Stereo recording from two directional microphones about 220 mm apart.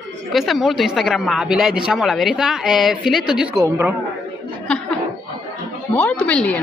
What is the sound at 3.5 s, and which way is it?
Speech, 10° right (ahead or behind).